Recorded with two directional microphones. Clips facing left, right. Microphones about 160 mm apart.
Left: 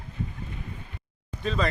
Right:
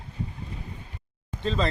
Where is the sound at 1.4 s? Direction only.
30° right (ahead or behind).